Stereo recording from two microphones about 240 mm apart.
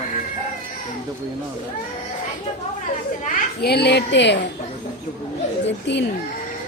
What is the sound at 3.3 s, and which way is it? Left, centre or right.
A child's voice, left.